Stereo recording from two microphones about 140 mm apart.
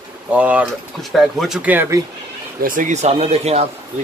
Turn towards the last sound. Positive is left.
turn(degrees=-50)  # may be behind; listen again after turning